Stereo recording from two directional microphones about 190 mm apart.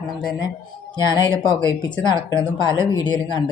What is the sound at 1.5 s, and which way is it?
A woman's voice, 25° left (ahead or behind).